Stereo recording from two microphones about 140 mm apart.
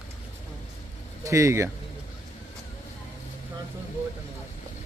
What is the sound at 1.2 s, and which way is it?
Speech, 20° right (ahead or behind).